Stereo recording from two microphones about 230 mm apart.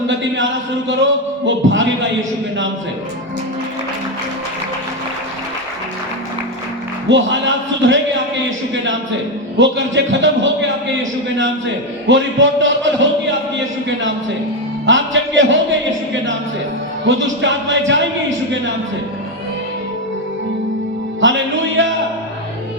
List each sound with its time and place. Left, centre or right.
0.1 s a man's voice: right
1.5 s a sound: right
7.1 s a man's voice: right
14.8 s music: right
17.1 s music: right
21.2 s music: right